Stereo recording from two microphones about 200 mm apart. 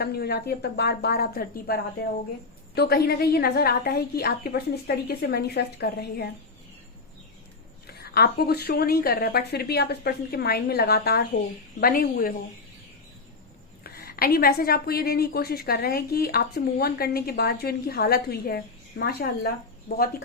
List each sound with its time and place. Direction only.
0.0 s a woman's voice: 50° left (ahead or behind)
7.9 s a woman's voice: 50° left (ahead or behind)
13.8 s a woman's voice: 50° left (ahead or behind)